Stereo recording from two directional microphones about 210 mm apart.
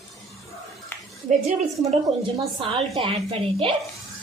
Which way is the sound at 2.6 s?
25° right (ahead or behind).